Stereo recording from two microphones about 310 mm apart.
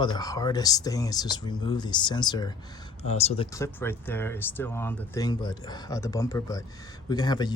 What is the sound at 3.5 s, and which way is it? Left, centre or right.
Speech, centre.